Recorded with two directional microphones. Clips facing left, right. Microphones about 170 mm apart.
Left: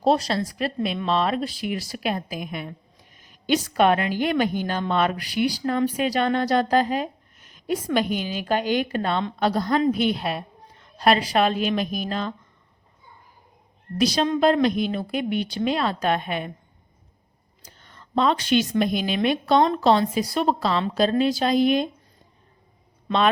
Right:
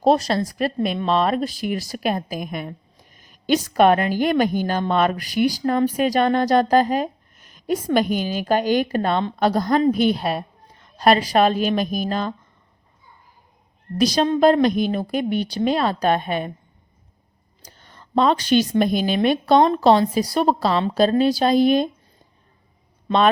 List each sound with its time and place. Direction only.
0.0 s a woman's voice: 50° right (ahead or behind)
14.0 s a woman's voice: 45° right (ahead or behind)
17.6 s whispering: 35° right (ahead or behind)
18.1 s a woman's voice: 40° right (ahead or behind)